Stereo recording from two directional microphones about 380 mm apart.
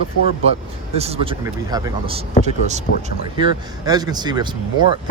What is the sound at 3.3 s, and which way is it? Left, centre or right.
Speech, centre.